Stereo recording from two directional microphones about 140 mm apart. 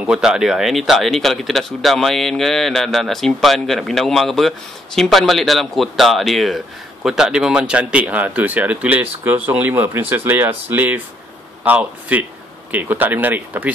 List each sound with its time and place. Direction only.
0.0 s a man's voice: 5° right (ahead or behind)